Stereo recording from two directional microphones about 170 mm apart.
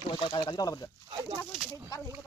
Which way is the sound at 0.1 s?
25° left (ahead or behind).